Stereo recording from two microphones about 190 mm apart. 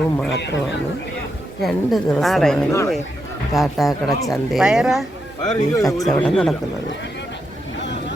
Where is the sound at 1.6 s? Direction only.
Centre (ahead or behind).